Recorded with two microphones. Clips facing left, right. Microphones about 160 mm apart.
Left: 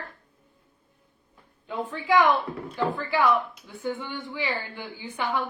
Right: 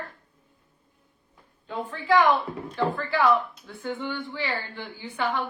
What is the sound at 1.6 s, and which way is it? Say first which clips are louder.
A woman's voice: left 1 dB; 15° left (ahead or behind).